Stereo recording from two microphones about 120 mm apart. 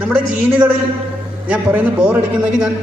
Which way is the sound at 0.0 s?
10° right (ahead or behind).